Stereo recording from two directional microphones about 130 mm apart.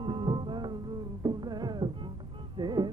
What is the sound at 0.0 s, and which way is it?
Music, 40° right (ahead or behind).